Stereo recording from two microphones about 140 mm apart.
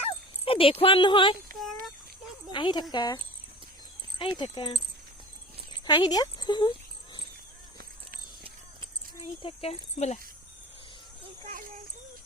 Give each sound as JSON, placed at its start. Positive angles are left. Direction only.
{"t": 0.4, "sound": "speech", "side_deg": 40}
{"t": 2.5, "sound": "speech", "side_deg": 30}
{"t": 4.2, "sound": "speech", "side_deg": 35}
{"t": 5.8, "sound": "speech", "side_deg": 30}
{"t": 9.2, "sound": "speech", "side_deg": 40}